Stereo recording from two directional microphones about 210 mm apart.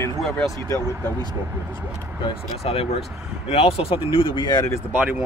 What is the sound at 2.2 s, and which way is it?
Speech, 30° left (ahead or behind).